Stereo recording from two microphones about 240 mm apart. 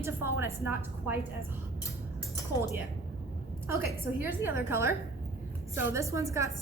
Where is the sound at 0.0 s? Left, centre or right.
Centre.